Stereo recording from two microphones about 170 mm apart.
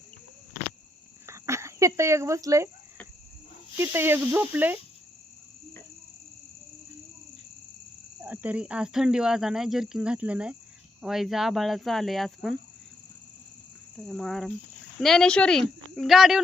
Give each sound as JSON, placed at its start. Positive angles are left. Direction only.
{"t": 1.3, "sound": "speech", "side_deg": -15}
{"t": 3.8, "sound": "speech", "side_deg": -15}
{"t": 8.2, "sound": "speech", "side_deg": -10}
{"t": 13.9, "sound": "speech", "side_deg": 0}